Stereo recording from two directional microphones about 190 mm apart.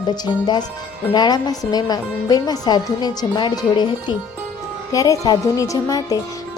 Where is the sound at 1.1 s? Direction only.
20° left (ahead or behind).